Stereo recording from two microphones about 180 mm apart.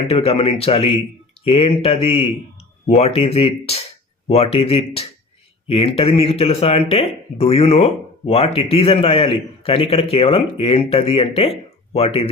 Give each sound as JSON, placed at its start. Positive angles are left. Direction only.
{"t": 0.1, "sound": "speech", "side_deg": 35}